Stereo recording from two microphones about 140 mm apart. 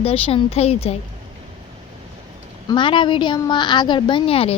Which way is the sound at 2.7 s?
35° left (ahead or behind).